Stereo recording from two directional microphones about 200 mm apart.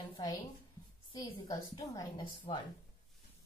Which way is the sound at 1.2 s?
15° left (ahead or behind).